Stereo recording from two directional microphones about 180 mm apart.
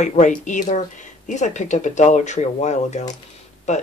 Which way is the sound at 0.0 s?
40° left (ahead or behind).